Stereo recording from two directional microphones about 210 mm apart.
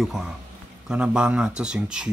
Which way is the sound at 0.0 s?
Centre (ahead or behind).